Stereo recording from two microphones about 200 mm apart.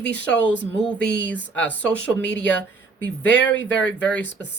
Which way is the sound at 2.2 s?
60° left (ahead or behind).